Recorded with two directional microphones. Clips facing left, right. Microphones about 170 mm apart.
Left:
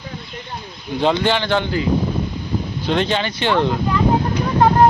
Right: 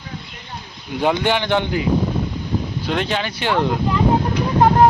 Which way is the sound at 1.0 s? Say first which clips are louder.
Left 1 dB; 15° right (ahead or behind).